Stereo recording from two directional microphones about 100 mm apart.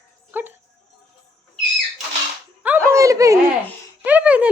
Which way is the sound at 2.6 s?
25° right (ahead or behind).